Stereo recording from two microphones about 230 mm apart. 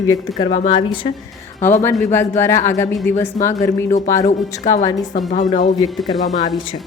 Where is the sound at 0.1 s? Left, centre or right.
Centre.